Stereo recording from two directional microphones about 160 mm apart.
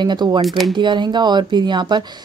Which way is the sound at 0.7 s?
30° right (ahead or behind).